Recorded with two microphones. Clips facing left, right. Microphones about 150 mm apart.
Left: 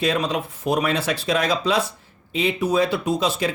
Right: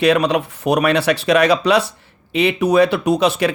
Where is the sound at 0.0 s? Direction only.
70° right (ahead or behind).